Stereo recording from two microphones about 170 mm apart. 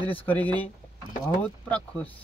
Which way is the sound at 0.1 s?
10° left (ahead or behind).